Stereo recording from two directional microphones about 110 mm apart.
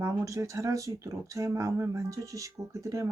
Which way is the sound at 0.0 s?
30° right (ahead or behind).